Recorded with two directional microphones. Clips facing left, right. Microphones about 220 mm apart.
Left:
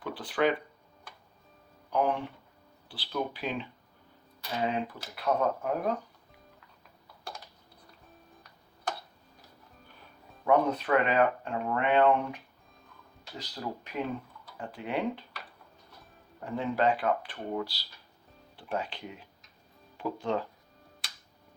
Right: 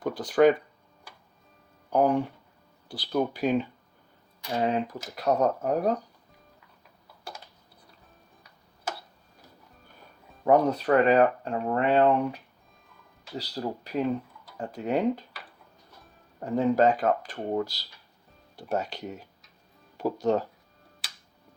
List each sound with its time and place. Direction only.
0.0 s speech: 45° right (ahead or behind)
1.9 s speech: 45° right (ahead or behind)
8.4 s tick-tock: 5° right (ahead or behind)
10.4 s speech: 40° right (ahead or behind)
13.4 s speech: 40° right (ahead or behind)
16.4 s speech: 40° right (ahead or behind)